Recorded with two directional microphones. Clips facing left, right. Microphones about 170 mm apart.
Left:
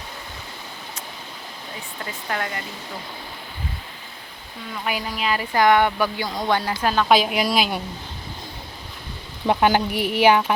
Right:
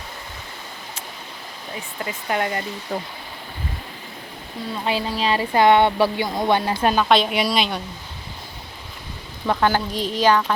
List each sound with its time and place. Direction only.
2.3 s speech: 20° right (ahead or behind)
2.9 s speech: 50° right (ahead or behind)
4.7 s speech: 30° right (ahead or behind)
7.1 s a woman's voice: 5° left (ahead or behind)
9.5 s speech: 15° left (ahead or behind)